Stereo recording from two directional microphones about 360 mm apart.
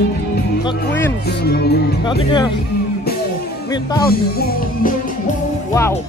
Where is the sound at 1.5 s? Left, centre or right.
Left.